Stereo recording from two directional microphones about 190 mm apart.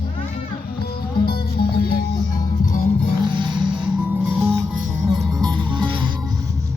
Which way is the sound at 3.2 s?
25° right (ahead or behind).